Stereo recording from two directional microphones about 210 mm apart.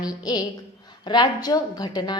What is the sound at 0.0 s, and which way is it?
A woman's voice, 20° left (ahead or behind).